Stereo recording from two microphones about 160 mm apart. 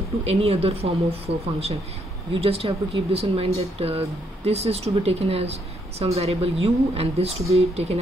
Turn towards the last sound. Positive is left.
turn(degrees=-40)  # may be behind; listen again after turning